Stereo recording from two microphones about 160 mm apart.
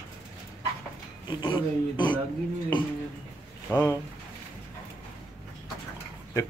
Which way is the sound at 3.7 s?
20° left (ahead or behind).